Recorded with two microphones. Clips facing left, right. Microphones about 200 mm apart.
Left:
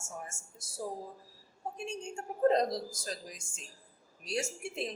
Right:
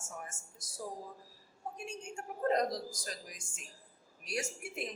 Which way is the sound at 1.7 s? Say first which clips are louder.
Left 3 dB; 30° left (ahead or behind).